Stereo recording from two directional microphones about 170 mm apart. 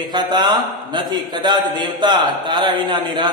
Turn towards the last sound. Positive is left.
turn(degrees=-25)  # may be behind; listen again after turning